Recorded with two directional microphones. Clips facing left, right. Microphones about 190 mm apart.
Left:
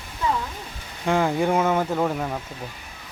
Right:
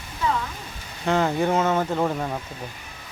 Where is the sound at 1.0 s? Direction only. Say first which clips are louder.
Even; 10° left (ahead or behind).